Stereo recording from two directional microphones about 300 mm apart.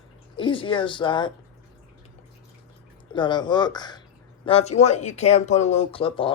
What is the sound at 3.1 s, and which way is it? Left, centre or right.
Speech, centre.